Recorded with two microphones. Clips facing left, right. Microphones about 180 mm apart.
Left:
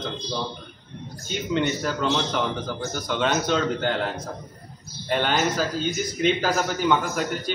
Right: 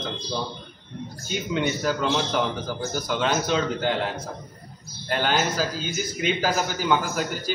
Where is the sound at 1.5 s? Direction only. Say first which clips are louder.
Even; 5° right (ahead or behind).